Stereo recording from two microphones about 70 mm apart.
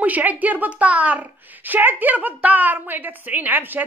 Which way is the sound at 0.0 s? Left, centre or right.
Right.